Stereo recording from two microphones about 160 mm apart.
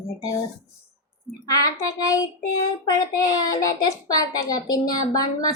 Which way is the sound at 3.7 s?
20° left (ahead or behind).